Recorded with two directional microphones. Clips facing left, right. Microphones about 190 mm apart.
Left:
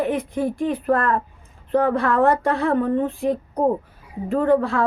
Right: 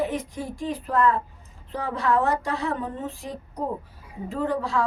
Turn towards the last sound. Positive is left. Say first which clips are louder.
# left 7 dB
turn(degrees=55)  # may be behind; listen again after turning